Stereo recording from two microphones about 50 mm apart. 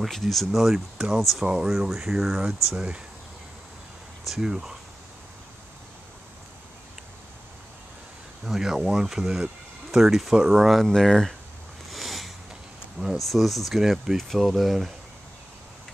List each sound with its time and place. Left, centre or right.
0.0 s speech: centre
0.7 s speech: centre
4.4 s speech: centre
8.5 s speech: centre
10.8 s speech: centre
11.9 s a sound: centre
13.2 s speech: centre